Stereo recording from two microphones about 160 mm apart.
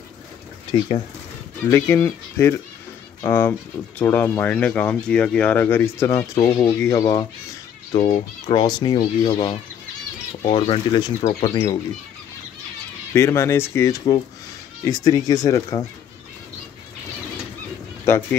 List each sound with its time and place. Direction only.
0.7 s speech: 30° left (ahead or behind)
1.7 s speech: 15° left (ahead or behind)
7.9 s speech: 35° left (ahead or behind)
13.1 s speech: 15° left (ahead or behind)
18.1 s speech: 15° left (ahead or behind)